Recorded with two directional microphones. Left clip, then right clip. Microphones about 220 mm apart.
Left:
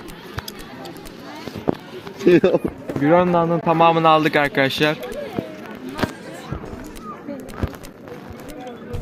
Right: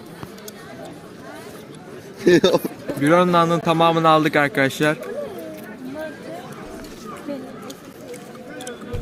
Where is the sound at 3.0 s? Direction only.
10° right (ahead or behind).